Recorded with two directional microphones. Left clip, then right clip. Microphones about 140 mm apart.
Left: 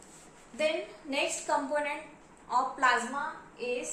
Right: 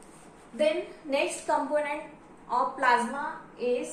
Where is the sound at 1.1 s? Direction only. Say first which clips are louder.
Right 3 dB; 25° left (ahead or behind).